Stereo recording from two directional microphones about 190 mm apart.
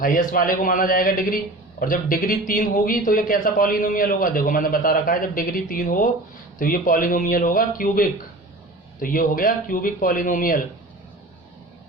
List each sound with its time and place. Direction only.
0.0 s a man's voice: 45° left (ahead or behind)